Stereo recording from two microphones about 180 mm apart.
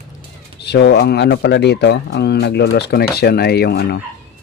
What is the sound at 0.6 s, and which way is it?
Speech, 70° left (ahead or behind).